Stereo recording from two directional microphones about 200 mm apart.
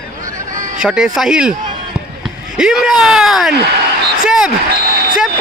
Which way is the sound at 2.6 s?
5° right (ahead or behind).